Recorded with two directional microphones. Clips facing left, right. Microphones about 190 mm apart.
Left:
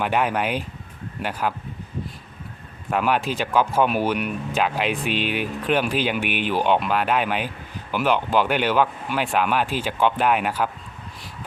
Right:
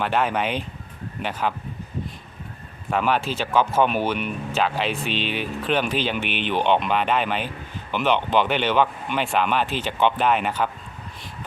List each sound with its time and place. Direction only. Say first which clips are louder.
0.0 s speech: even; 10° left (ahead or behind)
2.9 s speech: even; 5° left (ahead or behind)